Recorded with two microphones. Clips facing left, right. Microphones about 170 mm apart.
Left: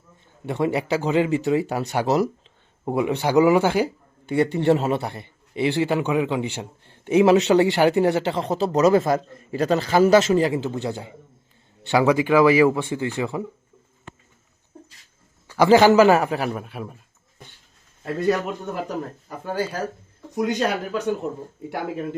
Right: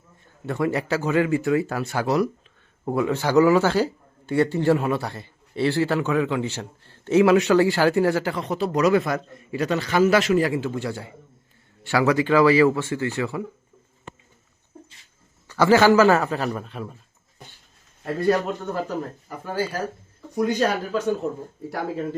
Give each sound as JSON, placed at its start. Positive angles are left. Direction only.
{"t": 0.4, "sound": "speech", "side_deg": 20}
{"t": 15.4, "sound": "speech", "side_deg": 15}
{"t": 18.7, "sound": "speech", "side_deg": 15}
{"t": 20.3, "sound": "speech", "side_deg": 20}